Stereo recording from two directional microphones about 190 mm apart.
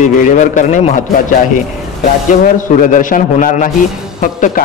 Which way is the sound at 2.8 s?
45° left (ahead or behind).